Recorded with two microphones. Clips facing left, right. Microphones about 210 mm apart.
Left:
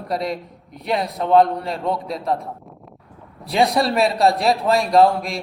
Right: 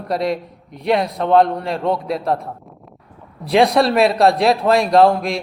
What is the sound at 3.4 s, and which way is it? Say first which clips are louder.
A man's voice: right 4 dB; centre (ahead or behind).